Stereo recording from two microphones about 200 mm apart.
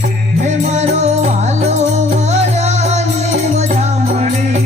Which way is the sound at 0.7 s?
35° right (ahead or behind).